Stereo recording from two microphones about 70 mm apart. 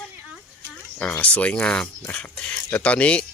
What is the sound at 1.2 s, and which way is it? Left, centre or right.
Speech, centre.